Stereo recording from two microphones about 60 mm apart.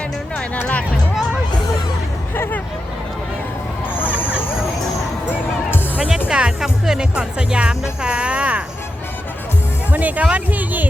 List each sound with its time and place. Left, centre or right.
0.3 s music: left
2.3 s hubbub: left
3.9 s a sound: left
6.0 s speech: centre
9.9 s speech: right